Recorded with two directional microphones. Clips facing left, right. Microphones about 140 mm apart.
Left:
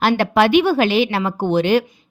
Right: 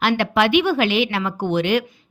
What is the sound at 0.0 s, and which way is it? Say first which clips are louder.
Speech: left 3 dB; 40° left (ahead or behind).